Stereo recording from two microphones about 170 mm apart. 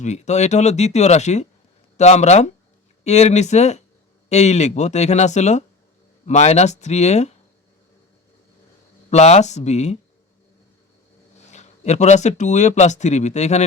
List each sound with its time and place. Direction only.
0.0 s speech: 40° left (ahead or behind)
9.0 s speech: 40° left (ahead or behind)
11.3 s speech: 40° left (ahead or behind)